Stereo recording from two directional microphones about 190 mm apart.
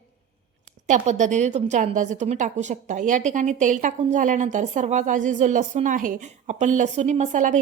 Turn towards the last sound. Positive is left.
turn(degrees=-40)  # may be behind; listen again after turning